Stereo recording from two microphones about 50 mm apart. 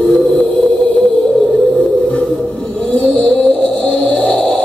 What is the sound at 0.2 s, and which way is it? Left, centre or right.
Music, centre.